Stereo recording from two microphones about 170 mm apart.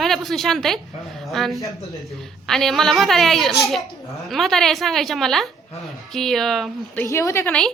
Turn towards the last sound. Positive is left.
turn(degrees=15)  # may be behind; listen again after turning